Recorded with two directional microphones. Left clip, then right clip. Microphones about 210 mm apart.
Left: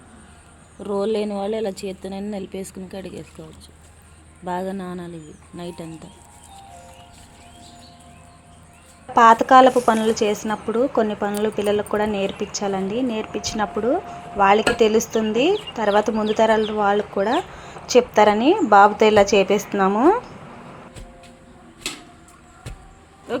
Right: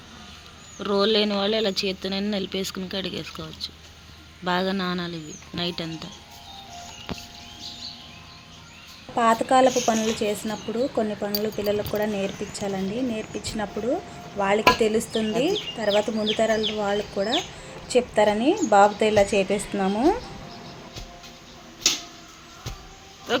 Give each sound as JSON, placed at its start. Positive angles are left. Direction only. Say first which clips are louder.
{"t": 0.8, "sound": "speech", "louder": "right 1 dB", "side_deg": 5}
{"t": 9.1, "sound": "speech", "louder": "left 8 dB", "side_deg": 10}